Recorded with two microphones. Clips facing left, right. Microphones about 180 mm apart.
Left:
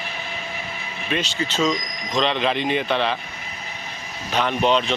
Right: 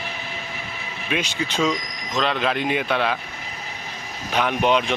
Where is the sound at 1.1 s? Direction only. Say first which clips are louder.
Even; 10° right (ahead or behind).